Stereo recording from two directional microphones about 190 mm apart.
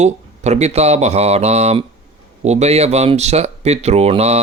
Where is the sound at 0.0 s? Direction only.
35° right (ahead or behind).